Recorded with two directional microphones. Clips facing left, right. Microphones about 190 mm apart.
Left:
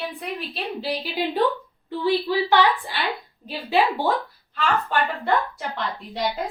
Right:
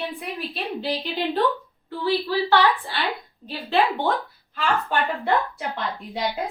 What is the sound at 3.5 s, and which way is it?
Speech, 5° left (ahead or behind).